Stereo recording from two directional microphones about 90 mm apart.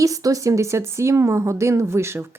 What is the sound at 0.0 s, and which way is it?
Speech, 40° right (ahead or behind).